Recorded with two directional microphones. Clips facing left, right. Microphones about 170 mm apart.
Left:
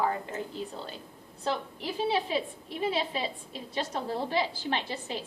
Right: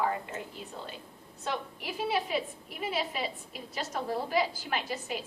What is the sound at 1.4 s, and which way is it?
A woman's voice, 30° left (ahead or behind).